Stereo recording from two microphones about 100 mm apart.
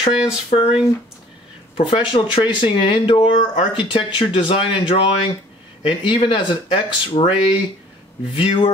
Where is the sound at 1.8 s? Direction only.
55° left (ahead or behind).